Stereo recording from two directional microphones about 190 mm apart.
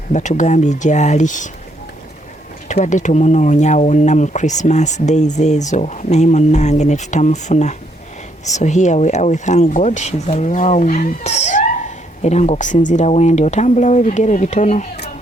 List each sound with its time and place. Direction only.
0.1 s speech: 40° left (ahead or behind)
2.6 s speech: 40° left (ahead or behind)